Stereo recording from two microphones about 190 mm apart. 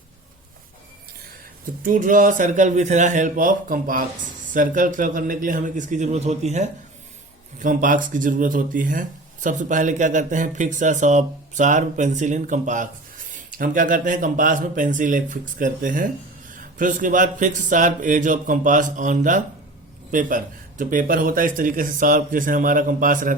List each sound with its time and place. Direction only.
1.8 s a man's voice: 45° right (ahead or behind)